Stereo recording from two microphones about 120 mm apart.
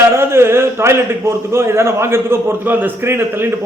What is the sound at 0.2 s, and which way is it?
A man's voice, 20° right (ahead or behind).